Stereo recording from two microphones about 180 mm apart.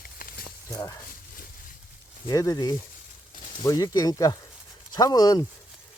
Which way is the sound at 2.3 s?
20° left (ahead or behind).